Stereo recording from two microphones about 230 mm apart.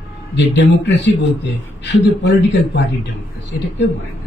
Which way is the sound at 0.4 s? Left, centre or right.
Left.